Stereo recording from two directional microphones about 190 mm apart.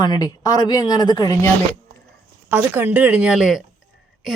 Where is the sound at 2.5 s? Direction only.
10° right (ahead or behind).